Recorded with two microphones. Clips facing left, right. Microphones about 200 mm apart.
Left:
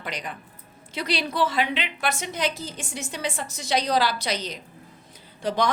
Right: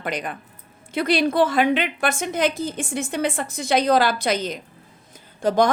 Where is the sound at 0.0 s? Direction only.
55° right (ahead or behind).